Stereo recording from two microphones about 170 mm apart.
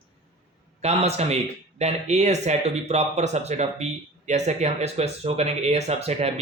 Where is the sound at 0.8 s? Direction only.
40° right (ahead or behind).